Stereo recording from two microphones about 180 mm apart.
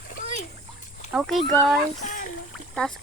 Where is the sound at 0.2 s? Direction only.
45° left (ahead or behind).